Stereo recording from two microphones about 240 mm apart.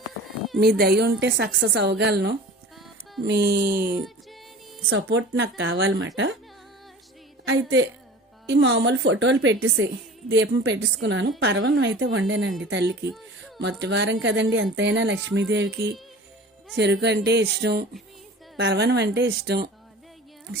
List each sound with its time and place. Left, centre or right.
0.8 s a woman's voice: right
3.9 s music: centre
4.9 s speech: right
7.4 s a woman's voice: right